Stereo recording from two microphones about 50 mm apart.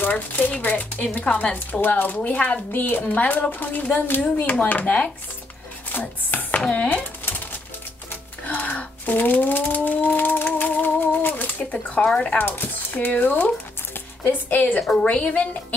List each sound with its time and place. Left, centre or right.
0.0 s a woman's voice: left
1.2 s a woman's voice: left
1.5 s a woman's voice: left
2.7 s a woman's voice: left
5.9 s a woman's voice: left
8.5 s a sound: left
11.7 s a woman's voice: left
12.4 s a woman's voice: left
14.8 s a woman's voice: left